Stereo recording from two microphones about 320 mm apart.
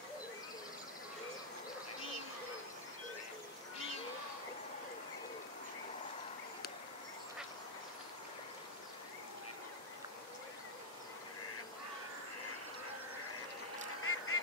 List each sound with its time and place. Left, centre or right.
14.0 s duck: left